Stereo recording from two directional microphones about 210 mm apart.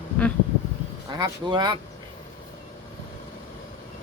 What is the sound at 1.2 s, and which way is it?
Speech, 20° right (ahead or behind).